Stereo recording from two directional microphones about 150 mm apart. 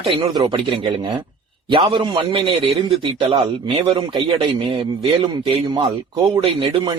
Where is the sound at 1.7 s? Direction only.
35° right (ahead or behind).